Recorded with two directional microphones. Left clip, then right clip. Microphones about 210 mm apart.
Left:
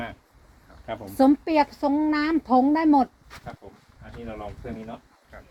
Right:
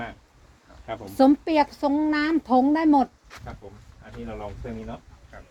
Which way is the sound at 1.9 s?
5° left (ahead or behind).